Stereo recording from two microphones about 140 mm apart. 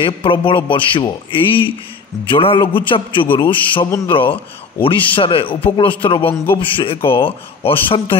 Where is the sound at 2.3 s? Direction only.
40° left (ahead or behind).